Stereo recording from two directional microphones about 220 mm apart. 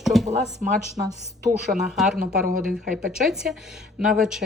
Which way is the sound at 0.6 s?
35° right (ahead or behind).